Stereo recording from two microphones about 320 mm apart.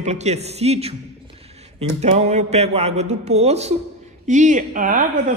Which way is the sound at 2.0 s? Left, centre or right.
Right.